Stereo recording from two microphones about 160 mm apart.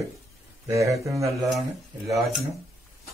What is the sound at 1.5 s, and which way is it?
Speech, centre (ahead or behind).